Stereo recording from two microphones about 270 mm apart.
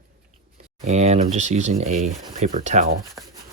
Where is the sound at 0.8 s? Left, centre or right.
Right.